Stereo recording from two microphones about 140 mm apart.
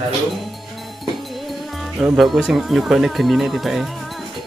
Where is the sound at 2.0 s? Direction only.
5° right (ahead or behind).